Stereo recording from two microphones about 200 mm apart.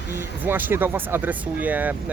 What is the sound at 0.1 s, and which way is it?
Speech, 10° right (ahead or behind).